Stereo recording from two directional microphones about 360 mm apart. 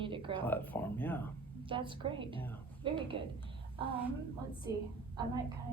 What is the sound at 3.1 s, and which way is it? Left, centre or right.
Speech, right.